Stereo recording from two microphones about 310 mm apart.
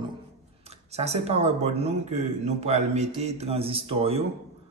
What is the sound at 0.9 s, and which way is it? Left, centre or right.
Speech, right.